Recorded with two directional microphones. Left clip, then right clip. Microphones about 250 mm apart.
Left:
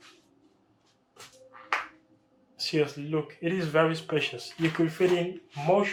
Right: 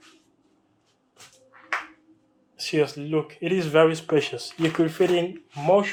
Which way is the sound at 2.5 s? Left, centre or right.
Centre.